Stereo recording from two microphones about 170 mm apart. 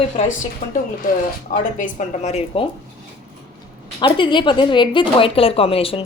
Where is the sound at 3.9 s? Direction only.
25° left (ahead or behind).